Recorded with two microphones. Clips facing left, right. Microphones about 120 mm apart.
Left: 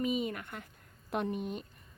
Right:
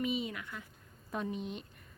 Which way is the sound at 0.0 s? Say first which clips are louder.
Left 2 dB; 45° left (ahead or behind).